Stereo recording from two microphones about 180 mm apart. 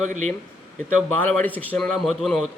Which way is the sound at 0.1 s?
40° right (ahead or behind).